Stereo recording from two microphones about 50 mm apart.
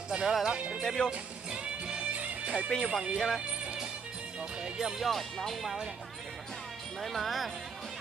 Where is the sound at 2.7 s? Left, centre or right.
Centre.